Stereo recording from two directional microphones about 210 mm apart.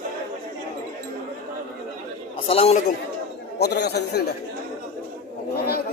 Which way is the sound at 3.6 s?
50° left (ahead or behind).